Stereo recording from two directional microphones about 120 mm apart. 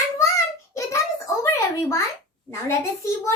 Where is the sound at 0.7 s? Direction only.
25° left (ahead or behind).